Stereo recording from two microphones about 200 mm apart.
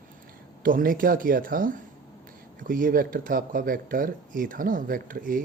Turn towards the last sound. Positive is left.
turn(degrees=-45)  # may be behind; listen again after turning